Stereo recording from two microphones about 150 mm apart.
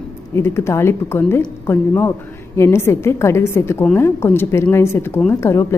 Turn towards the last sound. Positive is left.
turn(degrees=20)  # may be behind; listen again after turning